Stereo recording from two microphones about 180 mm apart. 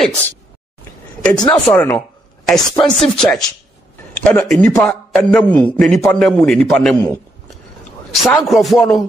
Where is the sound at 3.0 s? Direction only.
5° left (ahead or behind).